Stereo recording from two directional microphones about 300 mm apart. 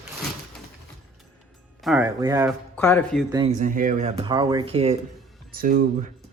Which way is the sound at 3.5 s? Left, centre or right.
Right.